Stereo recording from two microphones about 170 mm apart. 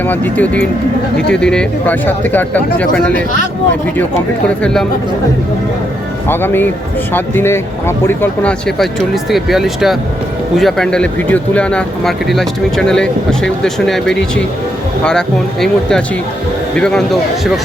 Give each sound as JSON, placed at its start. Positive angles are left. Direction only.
{"t": 0.1, "sound": "speech", "side_deg": 10}
{"t": 4.4, "sound": "speech", "side_deg": 5}
{"t": 6.2, "sound": "speech", "side_deg": 15}
{"t": 15.6, "sound": "speech", "side_deg": 5}